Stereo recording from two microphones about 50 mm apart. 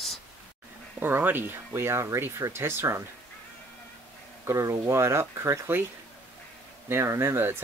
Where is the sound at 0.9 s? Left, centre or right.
Right.